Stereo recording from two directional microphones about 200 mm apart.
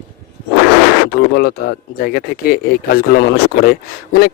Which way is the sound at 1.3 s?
50° left (ahead or behind).